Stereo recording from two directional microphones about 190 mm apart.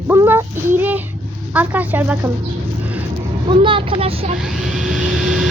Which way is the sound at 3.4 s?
25° right (ahead or behind).